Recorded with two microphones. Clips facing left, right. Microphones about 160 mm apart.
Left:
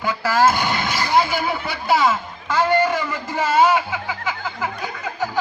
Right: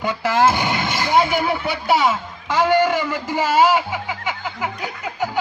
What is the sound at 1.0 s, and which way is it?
A man's voice, 20° right (ahead or behind).